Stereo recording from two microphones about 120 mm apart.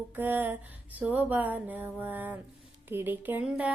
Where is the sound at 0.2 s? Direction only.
15° right (ahead or behind).